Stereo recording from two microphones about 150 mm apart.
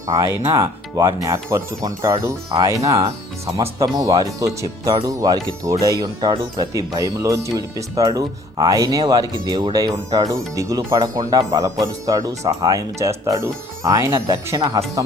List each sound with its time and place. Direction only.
0.1 s speech: 25° right (ahead or behind)